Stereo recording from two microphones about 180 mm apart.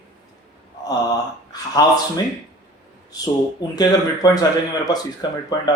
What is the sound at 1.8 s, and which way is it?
Speech, 20° left (ahead or behind).